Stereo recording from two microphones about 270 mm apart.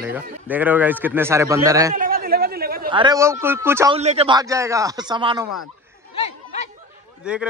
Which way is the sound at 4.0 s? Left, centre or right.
Right.